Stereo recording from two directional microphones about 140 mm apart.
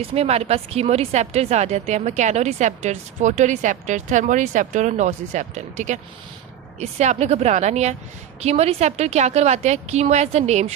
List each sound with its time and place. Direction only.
0.0 s a woman's voice: 50° right (ahead or behind)